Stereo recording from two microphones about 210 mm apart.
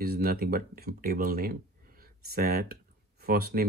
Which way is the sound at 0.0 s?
45° right (ahead or behind).